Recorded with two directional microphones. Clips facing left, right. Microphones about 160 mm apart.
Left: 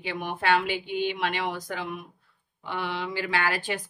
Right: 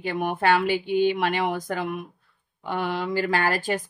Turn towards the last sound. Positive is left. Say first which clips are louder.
# right 4 dB
turn(degrees=-45)  # may be behind; listen again after turning